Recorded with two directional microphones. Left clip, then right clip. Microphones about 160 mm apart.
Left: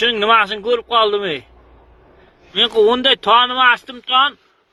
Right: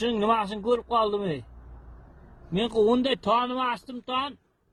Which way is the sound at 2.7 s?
30° left (ahead or behind).